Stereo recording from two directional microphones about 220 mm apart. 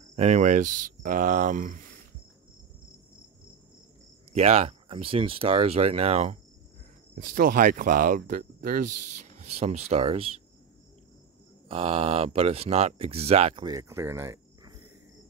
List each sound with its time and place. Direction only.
0.1 s speech: 30° right (ahead or behind)
4.3 s speech: 30° right (ahead or behind)
7.2 s speech: 40° right (ahead or behind)
11.7 s speech: 25° right (ahead or behind)